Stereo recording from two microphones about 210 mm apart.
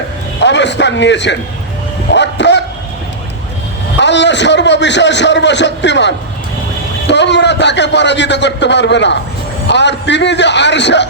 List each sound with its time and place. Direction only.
0.4 s a man's voice: 55° left (ahead or behind)
2.1 s dog: 55° left (ahead or behind)
4.0 s a man's voice: 55° left (ahead or behind)